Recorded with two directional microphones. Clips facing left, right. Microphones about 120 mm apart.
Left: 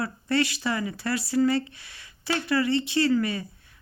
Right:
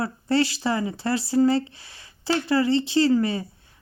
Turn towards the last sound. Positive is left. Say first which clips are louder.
# right 3 dB
turn(degrees=-30)  # may be behind; listen again after turning